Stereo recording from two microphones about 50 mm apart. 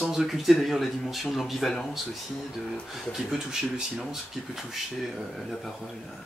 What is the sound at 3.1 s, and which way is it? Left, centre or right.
Speech, centre.